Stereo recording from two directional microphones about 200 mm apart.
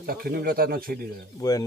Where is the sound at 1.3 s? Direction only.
15° left (ahead or behind).